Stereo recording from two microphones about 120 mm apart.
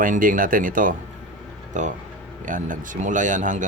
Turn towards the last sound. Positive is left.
turn(degrees=-90)